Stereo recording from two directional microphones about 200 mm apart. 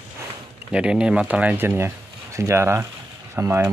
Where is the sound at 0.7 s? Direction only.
5° right (ahead or behind).